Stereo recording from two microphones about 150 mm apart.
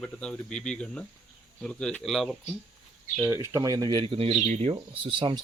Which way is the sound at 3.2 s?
20° right (ahead or behind).